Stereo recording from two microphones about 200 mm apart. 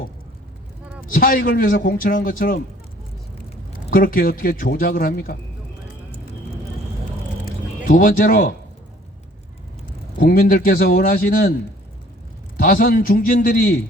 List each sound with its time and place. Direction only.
1.0 s a man's voice: 45° left (ahead or behind)
3.8 s a man's voice: 45° left (ahead or behind)
7.9 s a man's voice: 45° left (ahead or behind)
10.2 s a man's voice: 45° left (ahead or behind)
12.5 s a man's voice: 45° left (ahead or behind)